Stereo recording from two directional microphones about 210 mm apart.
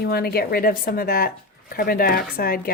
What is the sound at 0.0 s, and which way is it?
Speech, 50° left (ahead or behind).